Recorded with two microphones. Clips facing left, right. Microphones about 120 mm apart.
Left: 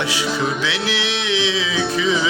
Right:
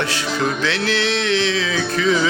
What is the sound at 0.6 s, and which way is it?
Music, 15° left (ahead or behind).